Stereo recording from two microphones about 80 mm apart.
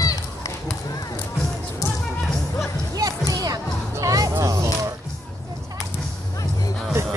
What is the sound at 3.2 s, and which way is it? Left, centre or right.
Music, right.